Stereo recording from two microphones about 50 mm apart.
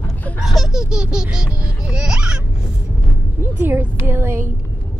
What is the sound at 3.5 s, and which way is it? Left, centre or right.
Music, right.